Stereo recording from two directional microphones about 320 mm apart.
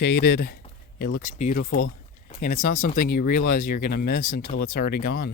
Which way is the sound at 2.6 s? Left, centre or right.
Left.